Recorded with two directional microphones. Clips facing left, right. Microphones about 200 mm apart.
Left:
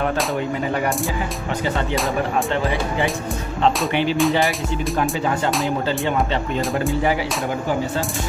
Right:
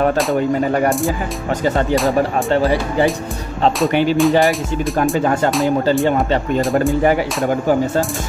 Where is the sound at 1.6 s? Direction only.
40° right (ahead or behind).